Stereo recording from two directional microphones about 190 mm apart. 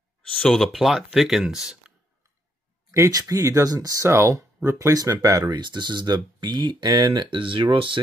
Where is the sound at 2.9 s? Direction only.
15° right (ahead or behind).